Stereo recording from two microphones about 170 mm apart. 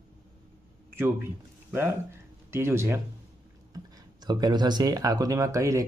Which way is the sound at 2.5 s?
15° right (ahead or behind).